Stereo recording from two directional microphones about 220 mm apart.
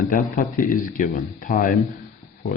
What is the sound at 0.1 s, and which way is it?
Speech, 35° left (ahead or behind).